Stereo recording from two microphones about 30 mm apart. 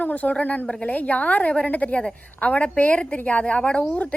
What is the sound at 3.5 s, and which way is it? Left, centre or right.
Speech, left.